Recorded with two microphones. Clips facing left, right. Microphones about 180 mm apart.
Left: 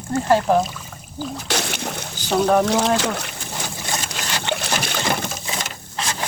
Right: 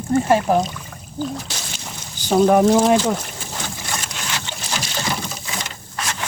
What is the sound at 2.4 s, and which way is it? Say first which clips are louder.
Speech: right 3 dB; 20° right (ahead or behind).